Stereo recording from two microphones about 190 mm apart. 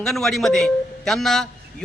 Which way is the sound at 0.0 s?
Centre (ahead or behind).